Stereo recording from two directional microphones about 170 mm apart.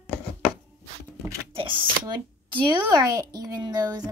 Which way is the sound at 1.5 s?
30° right (ahead or behind).